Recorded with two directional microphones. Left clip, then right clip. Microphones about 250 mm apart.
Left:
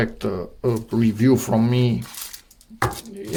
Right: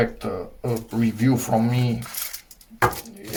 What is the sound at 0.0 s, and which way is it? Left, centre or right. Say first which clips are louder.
Speech: even; left.